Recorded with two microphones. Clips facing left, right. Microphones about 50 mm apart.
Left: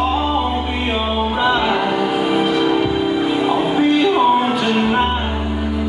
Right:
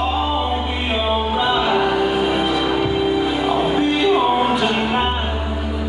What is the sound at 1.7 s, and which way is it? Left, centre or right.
Music, centre.